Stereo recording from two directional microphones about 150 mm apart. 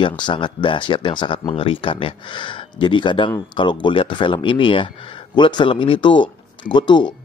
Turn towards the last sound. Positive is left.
turn(degrees=30)  # may be behind; listen again after turning